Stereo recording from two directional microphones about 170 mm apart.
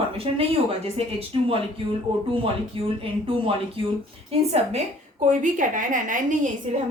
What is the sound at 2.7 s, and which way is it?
Speech, 30° right (ahead or behind).